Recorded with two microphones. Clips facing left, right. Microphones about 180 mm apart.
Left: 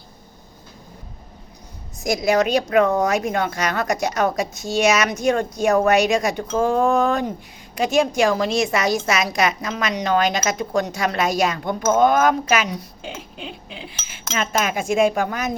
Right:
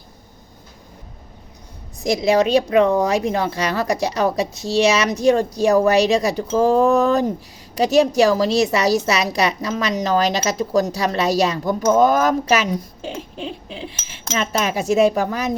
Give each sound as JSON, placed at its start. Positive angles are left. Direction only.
{"t": 2.0, "sound": "a woman's voice", "side_deg": -30}